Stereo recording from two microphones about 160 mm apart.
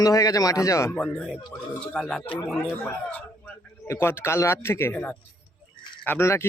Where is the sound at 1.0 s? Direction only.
Centre (ahead or behind).